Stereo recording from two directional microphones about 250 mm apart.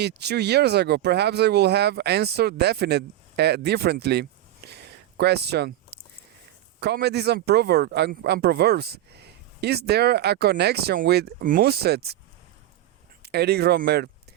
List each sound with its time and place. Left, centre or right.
0.0 s speech: right
13.2 s speech: right